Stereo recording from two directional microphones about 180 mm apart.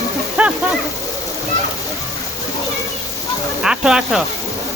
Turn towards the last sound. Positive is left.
turn(degrees=-5)  # may be behind; listen again after turning